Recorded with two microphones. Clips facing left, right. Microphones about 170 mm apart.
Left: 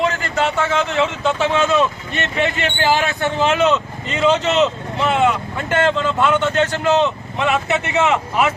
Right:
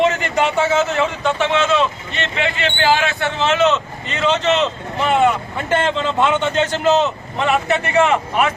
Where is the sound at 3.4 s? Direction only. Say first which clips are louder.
Right 1 dB; 10° left (ahead or behind).